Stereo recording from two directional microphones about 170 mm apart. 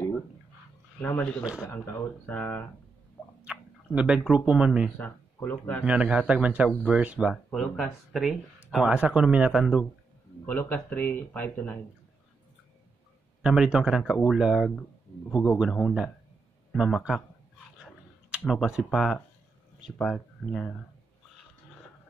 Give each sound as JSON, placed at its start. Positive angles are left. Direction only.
{"t": 1.0, "sound": "a man's voice", "side_deg": 10}
{"t": 1.4, "sound": "a man's voice", "side_deg": -5}
{"t": 1.7, "sound": "a man's voice", "side_deg": 15}
{"t": 3.4, "sound": "a sound", "side_deg": -5}
{"t": 4.3, "sound": "speech", "side_deg": -5}
{"t": 4.9, "sound": "speech", "side_deg": 10}
{"t": 5.9, "sound": "a man's voice", "side_deg": -5}
{"t": 10.4, "sound": "a man's voice", "side_deg": 10}
{"t": 13.4, "sound": "speech", "side_deg": -5}
{"t": 15.3, "sound": "a man's voice", "side_deg": 20}
{"t": 15.7, "sound": "speech", "side_deg": 0}
{"t": 17.8, "sound": "a sound", "side_deg": 0}
{"t": 20.0, "sound": "speech", "side_deg": 5}